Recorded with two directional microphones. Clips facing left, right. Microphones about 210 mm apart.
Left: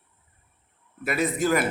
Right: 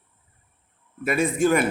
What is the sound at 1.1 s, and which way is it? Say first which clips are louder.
Speech: right 3 dB; 25° right (ahead or behind).